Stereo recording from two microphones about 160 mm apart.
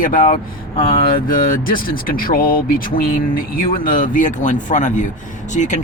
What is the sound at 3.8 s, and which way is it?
Speech, 60° left (ahead or behind).